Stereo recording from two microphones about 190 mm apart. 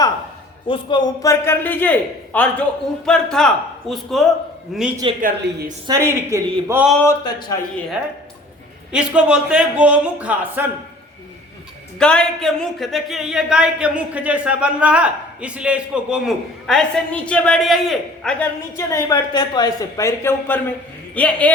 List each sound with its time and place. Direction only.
0.7 s speech: 25° left (ahead or behind); by 4.9 s 5° right (ahead or behind)
5.2 s a woman's voice: 50° right (ahead or behind)
5.9 s a man's voice: 15° right (ahead or behind)
7.0 s speech: 20° left (ahead or behind)
8.9 s a man's voice: 5° right (ahead or behind)
11.9 s speech: 5° left (ahead or behind)
18.8 s speech: 15° left (ahead or behind)